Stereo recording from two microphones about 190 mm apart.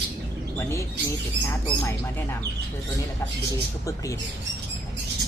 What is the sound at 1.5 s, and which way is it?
Speech, 10° left (ahead or behind).